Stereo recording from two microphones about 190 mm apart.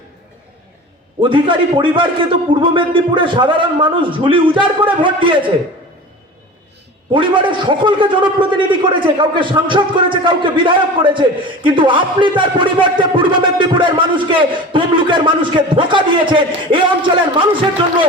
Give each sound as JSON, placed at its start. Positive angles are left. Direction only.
{"t": 1.2, "sound": "a man's voice", "side_deg": -25}
{"t": 7.1, "sound": "a man's voice", "side_deg": -25}